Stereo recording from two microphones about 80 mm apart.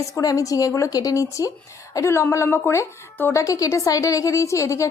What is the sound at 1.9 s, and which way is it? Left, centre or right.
A woman's voice, left.